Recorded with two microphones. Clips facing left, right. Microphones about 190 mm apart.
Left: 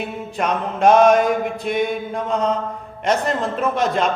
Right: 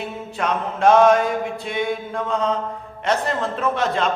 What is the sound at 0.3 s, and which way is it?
A man's voice, 15° left (ahead or behind).